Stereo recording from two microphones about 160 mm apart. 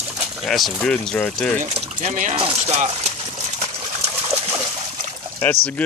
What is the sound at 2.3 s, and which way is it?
Speech, 40° right (ahead or behind).